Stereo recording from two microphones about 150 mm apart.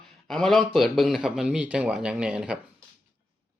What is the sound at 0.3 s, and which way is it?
Speech, 5° left (ahead or behind).